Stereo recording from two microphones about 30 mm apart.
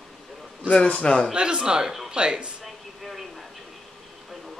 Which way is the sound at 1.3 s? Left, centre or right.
Right.